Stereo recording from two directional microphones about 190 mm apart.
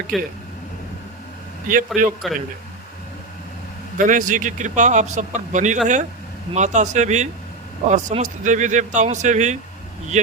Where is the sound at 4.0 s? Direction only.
45° right (ahead or behind).